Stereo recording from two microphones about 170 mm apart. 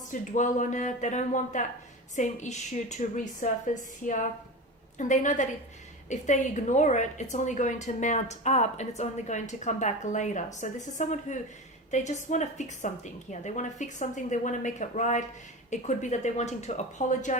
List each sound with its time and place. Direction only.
0.1 s a woman's voice: 45° left (ahead or behind)